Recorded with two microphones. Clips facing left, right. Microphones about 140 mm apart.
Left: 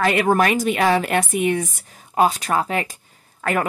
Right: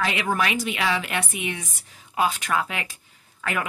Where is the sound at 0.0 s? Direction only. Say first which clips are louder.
Left 7 dB; 50° left (ahead or behind).